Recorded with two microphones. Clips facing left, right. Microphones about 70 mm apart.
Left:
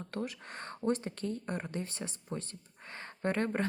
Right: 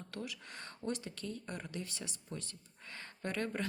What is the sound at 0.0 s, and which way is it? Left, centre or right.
Speech, left.